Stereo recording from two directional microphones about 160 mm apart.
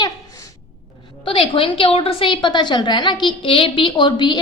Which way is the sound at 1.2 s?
35° left (ahead or behind).